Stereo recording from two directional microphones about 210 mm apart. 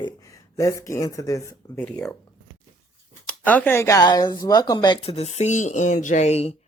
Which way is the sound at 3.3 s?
5° left (ahead or behind).